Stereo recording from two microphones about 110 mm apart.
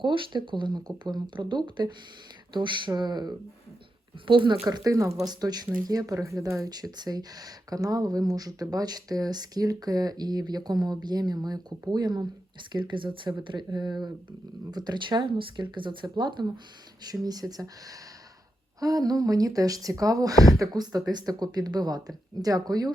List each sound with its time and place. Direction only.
0.0 s speech: 50° right (ahead or behind)
4.3 s speech: 50° right (ahead or behind)
4.7 s speech: 30° right (ahead or behind)